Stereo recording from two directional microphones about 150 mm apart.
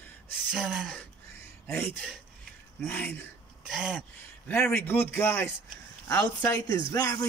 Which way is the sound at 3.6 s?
5° right (ahead or behind).